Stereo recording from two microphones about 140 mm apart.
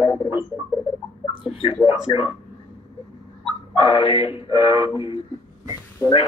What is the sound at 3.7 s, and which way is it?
Speech, 40° left (ahead or behind).